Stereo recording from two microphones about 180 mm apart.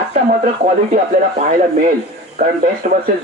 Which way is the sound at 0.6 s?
45° right (ahead or behind).